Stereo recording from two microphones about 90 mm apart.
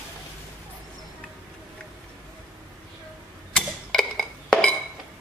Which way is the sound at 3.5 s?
5° left (ahead or behind).